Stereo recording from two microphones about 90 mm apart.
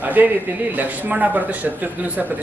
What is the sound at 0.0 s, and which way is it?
A man's voice, 20° right (ahead or behind).